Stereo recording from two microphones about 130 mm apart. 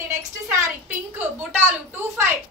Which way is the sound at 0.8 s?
15° right (ahead or behind).